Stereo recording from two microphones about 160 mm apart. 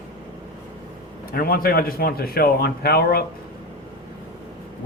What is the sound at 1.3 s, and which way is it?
Speech, 65° left (ahead or behind).